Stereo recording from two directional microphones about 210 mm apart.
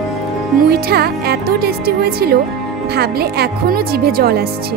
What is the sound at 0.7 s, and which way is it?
Speech, 45° right (ahead or behind).